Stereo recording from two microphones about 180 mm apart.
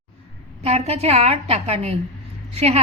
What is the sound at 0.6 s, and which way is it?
A woman's voice, 35° right (ahead or behind).